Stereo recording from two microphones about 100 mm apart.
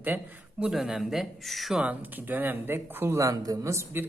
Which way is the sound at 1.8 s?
15° right (ahead or behind).